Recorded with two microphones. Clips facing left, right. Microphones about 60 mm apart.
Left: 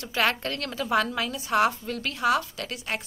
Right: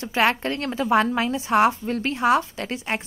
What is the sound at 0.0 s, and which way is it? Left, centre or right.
A woman's voice, right.